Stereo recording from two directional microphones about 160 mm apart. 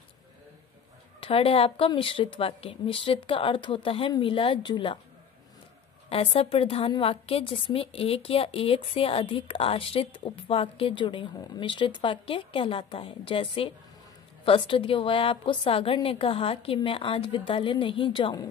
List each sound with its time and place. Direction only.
1.2 s a woman's voice: 35° left (ahead or behind)
6.0 s a woman's voice: 35° left (ahead or behind)